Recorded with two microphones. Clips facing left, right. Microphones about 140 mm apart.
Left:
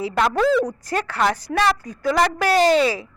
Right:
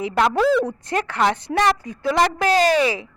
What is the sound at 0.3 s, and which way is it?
Speech, centre (ahead or behind).